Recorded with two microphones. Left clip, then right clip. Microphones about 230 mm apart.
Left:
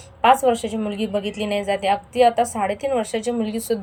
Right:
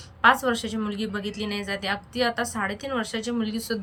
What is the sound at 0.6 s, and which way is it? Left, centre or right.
Speech, right.